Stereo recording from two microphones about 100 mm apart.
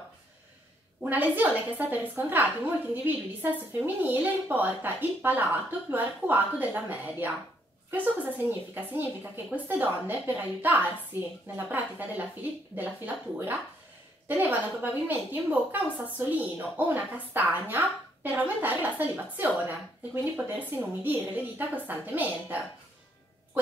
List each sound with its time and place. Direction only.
1.0 s a woman's voice: 20° right (ahead or behind)